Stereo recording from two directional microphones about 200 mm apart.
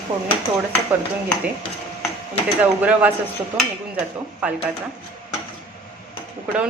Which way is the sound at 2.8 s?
10° right (ahead or behind).